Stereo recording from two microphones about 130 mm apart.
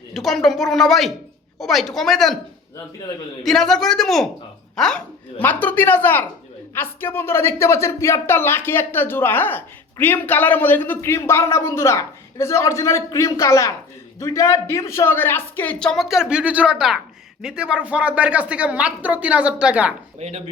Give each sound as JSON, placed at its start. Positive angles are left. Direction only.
{"t": 0.1, "sound": "a woman's voice", "side_deg": 0}
{"t": 3.4, "sound": "a woman's voice", "side_deg": 0}
{"t": 20.1, "sound": "speech", "side_deg": -60}